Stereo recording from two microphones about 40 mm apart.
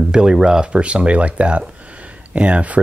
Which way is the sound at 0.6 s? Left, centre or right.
Right.